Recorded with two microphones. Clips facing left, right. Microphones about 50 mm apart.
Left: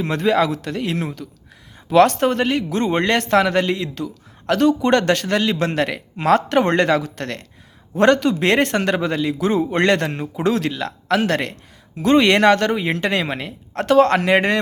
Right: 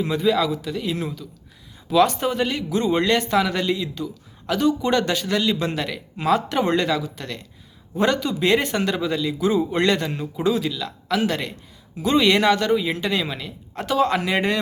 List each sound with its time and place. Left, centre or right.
0.0 s speech: left